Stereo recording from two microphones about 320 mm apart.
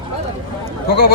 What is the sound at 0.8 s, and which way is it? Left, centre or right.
Clip-clop, left.